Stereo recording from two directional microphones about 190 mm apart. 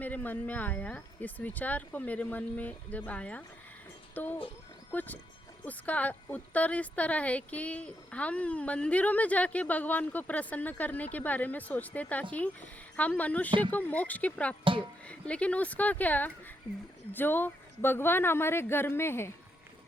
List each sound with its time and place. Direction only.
0.0 s a woman's voice: 10° left (ahead or behind)
4.1 s a sound: 10° left (ahead or behind)
4.9 s a woman's voice: 10° left (ahead or behind)
14.6 s speech: 25° right (ahead or behind)
15.0 s a woman's voice: 5° left (ahead or behind)